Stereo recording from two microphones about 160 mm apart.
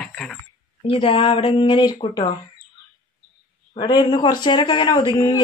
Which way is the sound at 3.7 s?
25° left (ahead or behind).